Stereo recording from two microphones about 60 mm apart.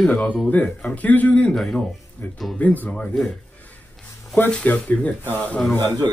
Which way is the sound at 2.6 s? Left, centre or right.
Left.